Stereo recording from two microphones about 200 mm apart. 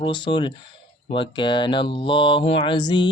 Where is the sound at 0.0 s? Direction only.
25° left (ahead or behind).